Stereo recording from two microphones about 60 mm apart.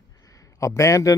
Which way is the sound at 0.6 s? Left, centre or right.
Left.